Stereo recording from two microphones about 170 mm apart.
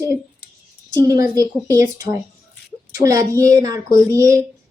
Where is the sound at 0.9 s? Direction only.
20° right (ahead or behind).